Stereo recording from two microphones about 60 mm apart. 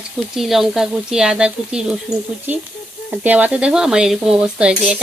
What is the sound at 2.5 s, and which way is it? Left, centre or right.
Speech, right.